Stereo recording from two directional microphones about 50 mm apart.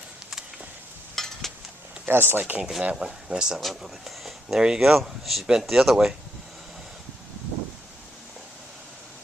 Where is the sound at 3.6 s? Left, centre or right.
Centre.